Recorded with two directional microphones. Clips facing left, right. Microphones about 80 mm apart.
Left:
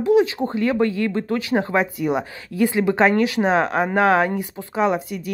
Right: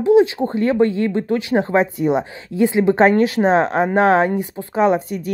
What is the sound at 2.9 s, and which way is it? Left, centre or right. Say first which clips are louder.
A woman's voice: right 3 dB; right.